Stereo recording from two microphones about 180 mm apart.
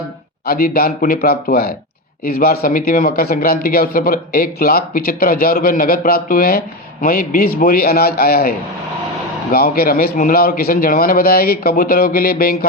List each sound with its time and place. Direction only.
0.4 s speech: 55° left (ahead or behind)